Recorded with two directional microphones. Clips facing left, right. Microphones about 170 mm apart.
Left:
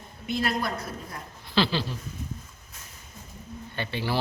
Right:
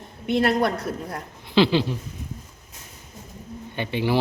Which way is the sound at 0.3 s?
65° right (ahead or behind).